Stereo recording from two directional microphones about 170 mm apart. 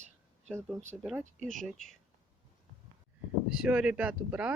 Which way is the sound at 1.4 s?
50° right (ahead or behind).